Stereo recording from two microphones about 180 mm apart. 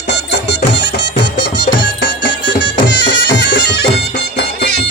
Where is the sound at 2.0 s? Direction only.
75° left (ahead or behind).